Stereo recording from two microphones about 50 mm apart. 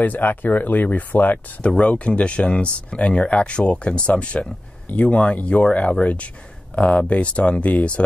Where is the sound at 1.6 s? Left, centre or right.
Left.